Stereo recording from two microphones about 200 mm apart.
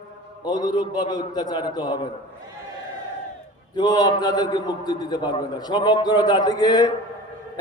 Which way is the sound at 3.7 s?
20° left (ahead or behind).